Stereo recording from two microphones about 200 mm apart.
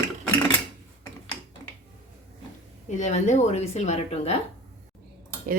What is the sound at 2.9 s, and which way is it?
A woman's voice, 35° left (ahead or behind).